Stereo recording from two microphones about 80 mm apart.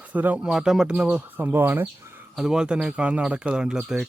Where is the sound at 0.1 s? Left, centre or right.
Centre.